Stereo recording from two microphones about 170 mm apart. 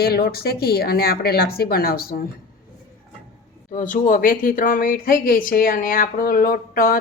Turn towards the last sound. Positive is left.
turn(degrees=55)  # may be behind; listen again after turning